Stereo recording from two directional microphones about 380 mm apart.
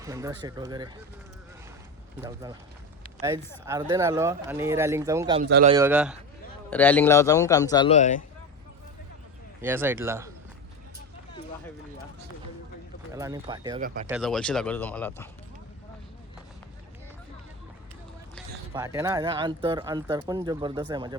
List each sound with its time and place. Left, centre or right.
0.0 s speech: centre
2.2 s speech: centre
5.5 s a man's voice: right
5.7 s a man's voice: centre
9.6 s speech: centre
13.1 s speech: centre
13.8 s a man's voice: right
14.1 s speech: centre
18.3 s speech: centre